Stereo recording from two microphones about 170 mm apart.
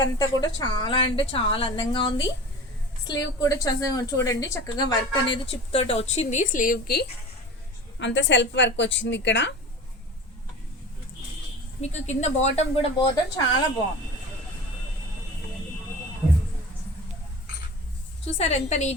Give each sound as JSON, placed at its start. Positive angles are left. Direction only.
{"t": 0.0, "sound": "a woman's voice", "side_deg": 25}
{"t": 7.9, "sound": "a woman's voice", "side_deg": 90}
{"t": 11.8, "sound": "speech", "side_deg": 40}
{"t": 18.3, "sound": "speech", "side_deg": 40}